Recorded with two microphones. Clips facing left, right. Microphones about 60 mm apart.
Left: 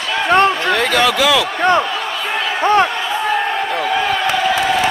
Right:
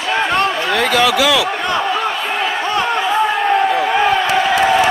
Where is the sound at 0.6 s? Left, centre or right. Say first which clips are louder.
Even; centre.